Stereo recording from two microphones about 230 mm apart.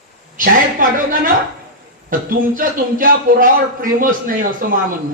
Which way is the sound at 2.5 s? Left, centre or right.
Right.